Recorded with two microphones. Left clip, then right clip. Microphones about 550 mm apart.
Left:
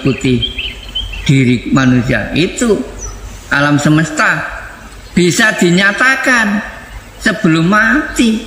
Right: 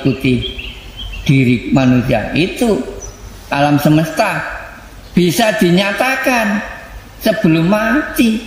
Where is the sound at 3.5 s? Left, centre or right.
Right.